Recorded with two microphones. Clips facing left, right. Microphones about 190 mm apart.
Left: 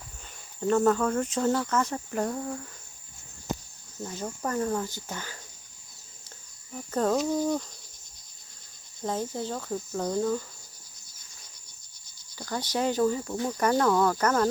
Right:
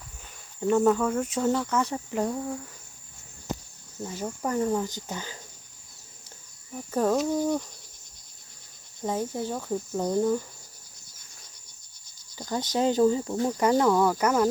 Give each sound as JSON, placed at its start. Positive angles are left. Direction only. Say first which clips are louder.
{"t": 0.6, "sound": "speech", "louder": "right 1 dB", "side_deg": -10}
{"t": 4.0, "sound": "speech", "louder": "right 2 dB", "side_deg": -10}
{"t": 6.7, "sound": "speech", "louder": "right 1 dB", "side_deg": -10}
{"t": 9.0, "sound": "speech", "louder": "right 2 dB", "side_deg": -10}
{"t": 12.4, "sound": "cricket", "louder": "right 3 dB", "side_deg": -20}
{"t": 12.7, "sound": "speech", "louder": "right 3 dB", "side_deg": -25}
{"t": 13.5, "sound": "speech", "louder": "right 2 dB", "side_deg": -15}